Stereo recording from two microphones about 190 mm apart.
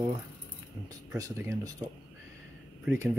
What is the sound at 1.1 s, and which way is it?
Speech, 15° right (ahead or behind).